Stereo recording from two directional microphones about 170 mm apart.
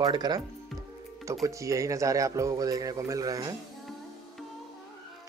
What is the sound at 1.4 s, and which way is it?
Speech, 20° right (ahead or behind).